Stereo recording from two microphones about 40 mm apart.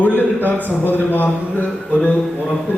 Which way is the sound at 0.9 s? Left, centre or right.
Left.